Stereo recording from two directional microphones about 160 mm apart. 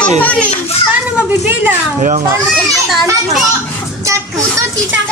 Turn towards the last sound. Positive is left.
turn(degrees=-20)  # may be behind; listen again after turning